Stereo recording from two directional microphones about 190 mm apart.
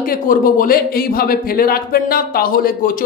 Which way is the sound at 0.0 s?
50° left (ahead or behind).